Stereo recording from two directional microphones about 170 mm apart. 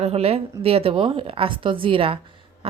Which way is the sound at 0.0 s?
35° right (ahead or behind).